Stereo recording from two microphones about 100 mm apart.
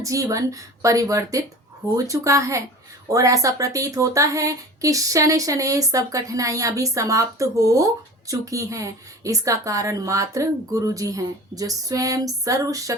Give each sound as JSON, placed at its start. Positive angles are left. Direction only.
{"t": 0.0, "sound": "speech", "side_deg": -35}